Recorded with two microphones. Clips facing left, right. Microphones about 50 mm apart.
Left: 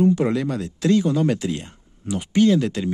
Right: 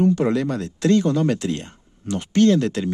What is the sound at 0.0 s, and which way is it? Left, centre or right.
Speech, centre.